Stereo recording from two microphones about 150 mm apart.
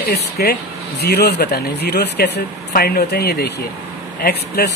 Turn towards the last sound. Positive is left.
turn(degrees=90)